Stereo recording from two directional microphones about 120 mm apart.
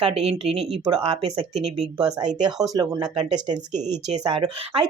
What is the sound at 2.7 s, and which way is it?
Speech, 30° right (ahead or behind).